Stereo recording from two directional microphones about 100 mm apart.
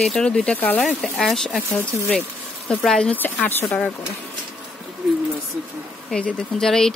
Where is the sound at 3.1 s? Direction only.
20° left (ahead or behind).